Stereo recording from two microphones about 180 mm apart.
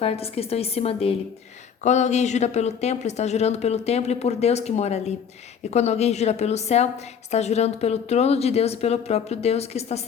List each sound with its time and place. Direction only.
0.0 s speech: 35° left (ahead or behind)